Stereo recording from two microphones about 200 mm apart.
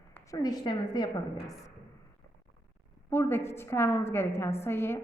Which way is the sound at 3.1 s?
10° left (ahead or behind).